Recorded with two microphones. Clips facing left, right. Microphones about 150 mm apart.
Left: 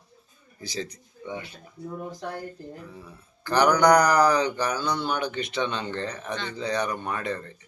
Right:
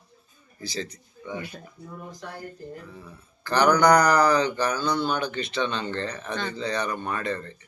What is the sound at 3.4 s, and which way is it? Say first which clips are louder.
Speech: even; 15° left (ahead or behind).